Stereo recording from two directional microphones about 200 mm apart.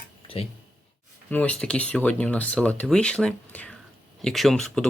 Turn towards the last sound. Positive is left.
turn(degrees=5)  # may be behind; listen again after turning